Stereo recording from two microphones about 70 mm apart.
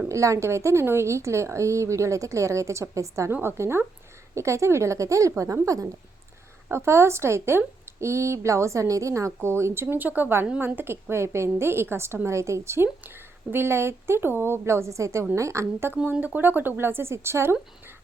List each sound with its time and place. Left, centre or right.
0.1 s a woman's voice: right
10.8 s a woman's voice: right
16.2 s speech: right